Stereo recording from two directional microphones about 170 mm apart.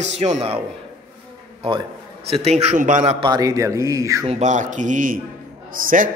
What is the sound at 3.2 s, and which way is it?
A man's voice, 20° right (ahead or behind).